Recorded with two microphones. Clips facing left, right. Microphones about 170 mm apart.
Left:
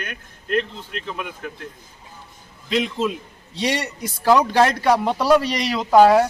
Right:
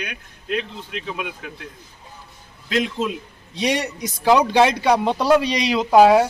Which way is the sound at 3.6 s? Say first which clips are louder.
Right 2 dB; 10° right (ahead or behind).